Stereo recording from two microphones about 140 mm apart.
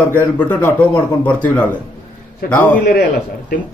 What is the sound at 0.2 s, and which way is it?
A man's voice, 15° left (ahead or behind).